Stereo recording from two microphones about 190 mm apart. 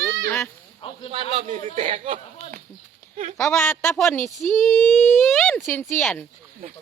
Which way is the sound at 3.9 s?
Centre (ahead or behind).